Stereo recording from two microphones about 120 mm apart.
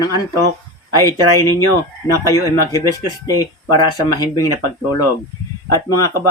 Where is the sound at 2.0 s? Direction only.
30° left (ahead or behind).